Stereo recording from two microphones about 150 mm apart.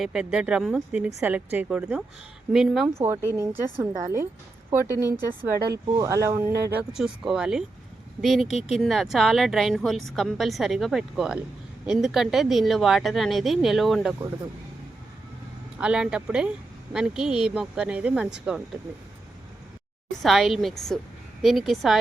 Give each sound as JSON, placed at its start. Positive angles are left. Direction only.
{"t": 0.0, "sound": "a woman's voice", "side_deg": -5}
{"t": 3.0, "sound": "speech", "side_deg": -15}
{"t": 5.5, "sound": "speech", "side_deg": -90}
{"t": 5.9, "sound": "speech", "side_deg": -20}
{"t": 6.7, "sound": "a woman's voice", "side_deg": -10}
{"t": 15.8, "sound": "a woman's voice", "side_deg": -5}
{"t": 20.2, "sound": "a woman's voice", "side_deg": 0}